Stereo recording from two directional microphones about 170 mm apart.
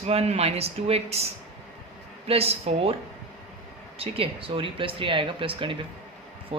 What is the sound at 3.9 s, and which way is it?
Speech, 35° right (ahead or behind).